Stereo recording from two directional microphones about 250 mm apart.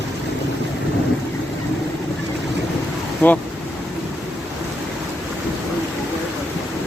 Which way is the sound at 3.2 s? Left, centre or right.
Centre.